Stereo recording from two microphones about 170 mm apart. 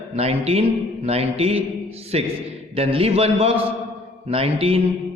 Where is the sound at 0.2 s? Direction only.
35° right (ahead or behind).